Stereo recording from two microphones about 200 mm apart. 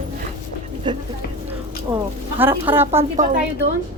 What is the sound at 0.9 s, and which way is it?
Speech, 25° right (ahead or behind).